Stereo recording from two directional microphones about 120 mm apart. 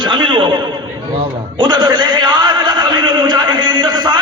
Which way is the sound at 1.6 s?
40° right (ahead or behind).